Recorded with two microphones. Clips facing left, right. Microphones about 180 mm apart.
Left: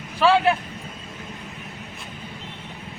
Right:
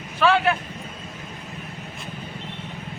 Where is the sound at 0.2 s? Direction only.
30° left (ahead or behind).